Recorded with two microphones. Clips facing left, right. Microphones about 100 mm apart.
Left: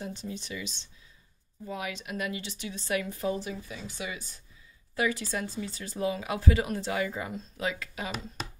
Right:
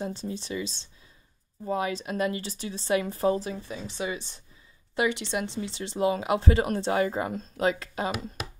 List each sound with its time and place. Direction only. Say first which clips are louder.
0.0 s a woman's voice: right 5 dB; 30° right (ahead or behind)